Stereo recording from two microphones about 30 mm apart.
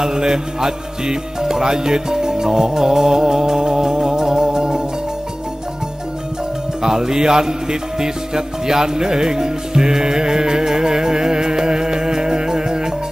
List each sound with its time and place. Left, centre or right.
0.0 s music: right
6.8 s speech: right
8.0 s music: right